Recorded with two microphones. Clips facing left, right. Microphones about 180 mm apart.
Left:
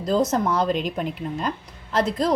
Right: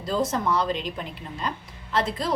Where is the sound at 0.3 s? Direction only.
45° left (ahead or behind).